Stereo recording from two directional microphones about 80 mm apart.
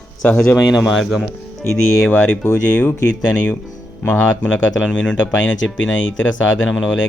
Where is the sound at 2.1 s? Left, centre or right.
Left.